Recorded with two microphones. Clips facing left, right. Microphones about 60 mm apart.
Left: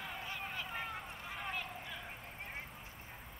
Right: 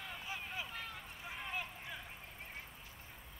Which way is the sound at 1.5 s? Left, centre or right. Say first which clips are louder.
Left 1 dB; centre.